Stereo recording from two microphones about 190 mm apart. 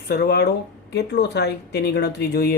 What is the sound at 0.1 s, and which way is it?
Speech, 55° left (ahead or behind).